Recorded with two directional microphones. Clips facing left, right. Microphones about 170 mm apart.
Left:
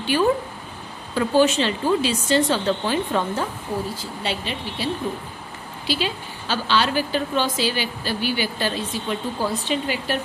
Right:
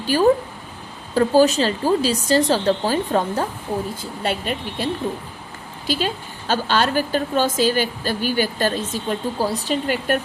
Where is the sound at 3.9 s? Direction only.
50° right (ahead or behind).